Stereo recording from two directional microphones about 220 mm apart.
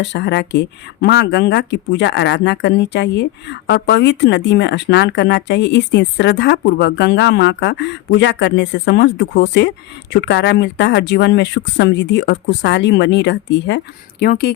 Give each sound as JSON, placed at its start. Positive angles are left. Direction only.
{"t": 0.0, "sound": "speech", "side_deg": 55}